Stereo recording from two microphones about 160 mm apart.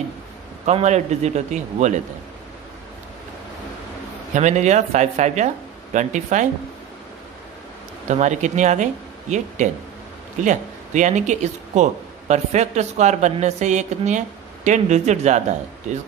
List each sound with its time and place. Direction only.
0.7 s speech: 45° right (ahead or behind)
4.3 s speech: 50° right (ahead or behind)
8.1 s speech: 50° right (ahead or behind)